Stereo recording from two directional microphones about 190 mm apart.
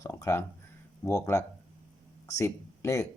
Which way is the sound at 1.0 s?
15° left (ahead or behind).